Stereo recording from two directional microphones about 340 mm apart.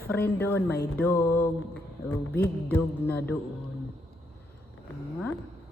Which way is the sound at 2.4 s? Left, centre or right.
Centre.